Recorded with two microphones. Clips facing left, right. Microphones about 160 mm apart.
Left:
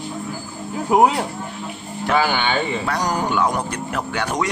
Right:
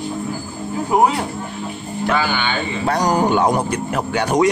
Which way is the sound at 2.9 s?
35° right (ahead or behind).